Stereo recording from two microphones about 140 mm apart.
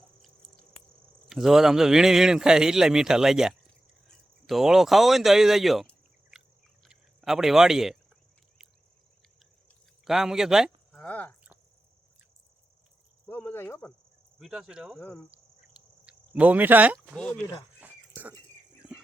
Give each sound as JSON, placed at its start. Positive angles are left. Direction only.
{"t": 1.3, "sound": "a man's voice", "side_deg": -5}
{"t": 10.0, "sound": "a man's voice", "side_deg": 0}
{"t": 10.9, "sound": "speech", "side_deg": 10}
{"t": 13.2, "sound": "cricket", "side_deg": 15}
{"t": 14.3, "sound": "a man's voice", "side_deg": -5}
{"t": 14.9, "sound": "speech", "side_deg": 15}
{"t": 16.0, "sound": "speech", "side_deg": -10}
{"t": 17.2, "sound": "speech", "side_deg": 10}
{"t": 17.7, "sound": "a sound", "side_deg": -10}